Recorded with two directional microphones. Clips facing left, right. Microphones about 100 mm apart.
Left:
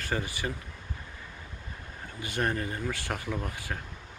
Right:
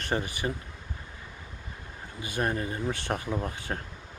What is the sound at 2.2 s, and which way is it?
Speech, 20° right (ahead or behind).